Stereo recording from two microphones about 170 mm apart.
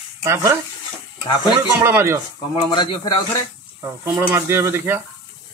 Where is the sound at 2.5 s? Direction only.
30° left (ahead or behind).